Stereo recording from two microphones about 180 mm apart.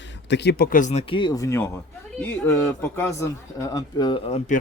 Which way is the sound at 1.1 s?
25° left (ahead or behind).